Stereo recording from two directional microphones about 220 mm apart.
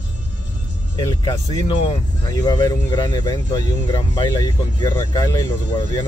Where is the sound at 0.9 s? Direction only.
20° left (ahead or behind).